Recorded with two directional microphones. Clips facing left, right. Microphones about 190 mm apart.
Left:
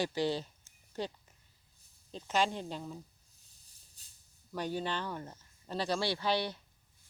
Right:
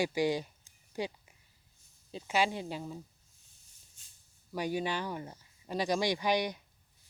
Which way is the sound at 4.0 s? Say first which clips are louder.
Even; 35° left (ahead or behind).